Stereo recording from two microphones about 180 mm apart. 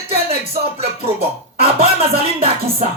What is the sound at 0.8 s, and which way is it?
Music, 35° right (ahead or behind).